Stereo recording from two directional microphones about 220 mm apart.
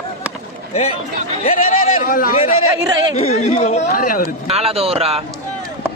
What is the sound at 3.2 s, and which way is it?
Speech, 30° left (ahead or behind).